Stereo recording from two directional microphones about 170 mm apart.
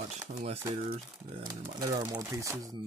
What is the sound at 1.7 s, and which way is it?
Speech, 20° right (ahead or behind).